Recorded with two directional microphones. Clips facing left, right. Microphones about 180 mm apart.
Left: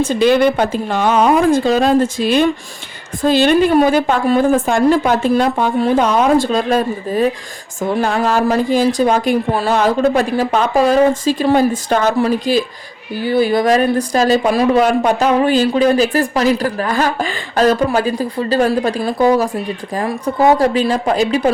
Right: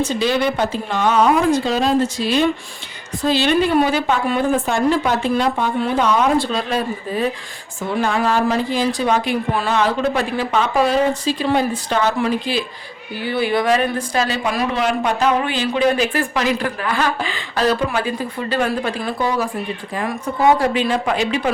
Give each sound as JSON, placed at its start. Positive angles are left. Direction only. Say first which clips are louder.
{"t": 0.0, "sound": "a woman's voice", "louder": "left 6 dB", "side_deg": 55}